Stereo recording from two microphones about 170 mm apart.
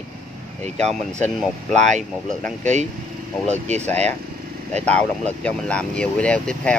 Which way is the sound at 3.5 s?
40° right (ahead or behind).